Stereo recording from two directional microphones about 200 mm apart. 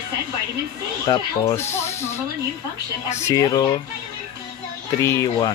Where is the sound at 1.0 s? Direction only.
15° left (ahead or behind).